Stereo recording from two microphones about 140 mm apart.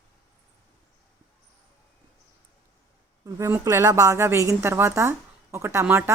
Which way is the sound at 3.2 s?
20° right (ahead or behind).